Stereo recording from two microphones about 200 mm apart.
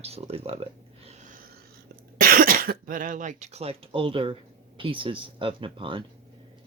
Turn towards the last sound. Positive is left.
turn(degrees=-25)  # may be behind; listen again after turning